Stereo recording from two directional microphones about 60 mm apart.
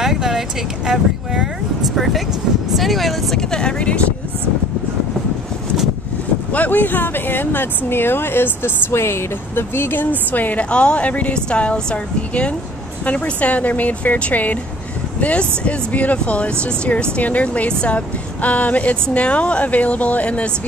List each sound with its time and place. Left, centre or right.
0.0 s vehicle: centre
2.7 s speech: centre
3.3 s speech: centre
6.5 s speech: left